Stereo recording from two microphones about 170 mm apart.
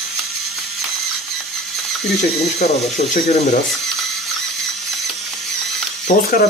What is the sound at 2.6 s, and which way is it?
Speech, 40° left (ahead or behind).